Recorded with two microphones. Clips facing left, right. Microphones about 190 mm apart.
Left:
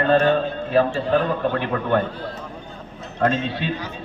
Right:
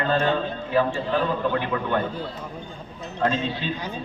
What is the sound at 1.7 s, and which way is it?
Speech, 50° left (ahead or behind).